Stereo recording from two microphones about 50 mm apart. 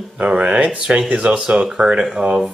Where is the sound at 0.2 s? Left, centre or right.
Right.